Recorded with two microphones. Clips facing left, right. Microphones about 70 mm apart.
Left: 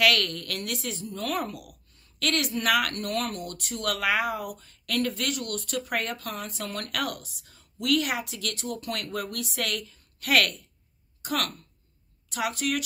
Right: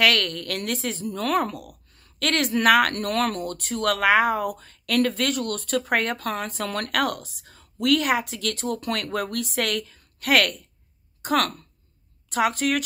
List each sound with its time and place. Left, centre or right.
0.0 s speech: right
1.0 s speech: right
2.0 s a sound: right
2.5 s speech: right
3.3 s speech: right
4.6 s speech: right
8.7 s speech: right
9.0 s speech: right